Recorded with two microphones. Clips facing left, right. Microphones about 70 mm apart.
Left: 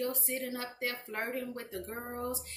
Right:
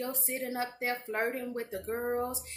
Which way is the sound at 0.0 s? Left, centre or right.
Right.